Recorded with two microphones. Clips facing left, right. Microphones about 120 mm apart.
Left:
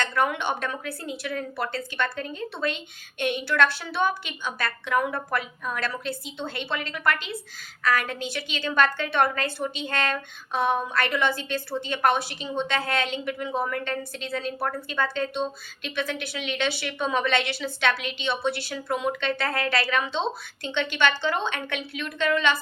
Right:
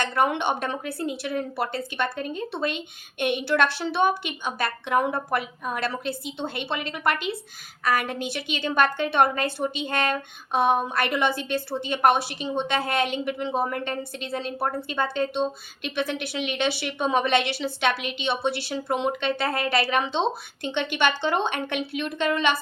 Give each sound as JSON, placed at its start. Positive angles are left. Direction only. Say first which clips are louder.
{"t": 0.1, "sound": "a woman's voice", "louder": "right 2 dB", "side_deg": -25}